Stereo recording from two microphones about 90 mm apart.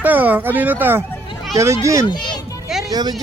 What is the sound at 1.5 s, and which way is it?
Speech, 35° right (ahead or behind).